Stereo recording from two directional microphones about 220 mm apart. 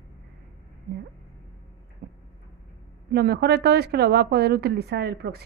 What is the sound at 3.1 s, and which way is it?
Speech, 50° right (ahead or behind).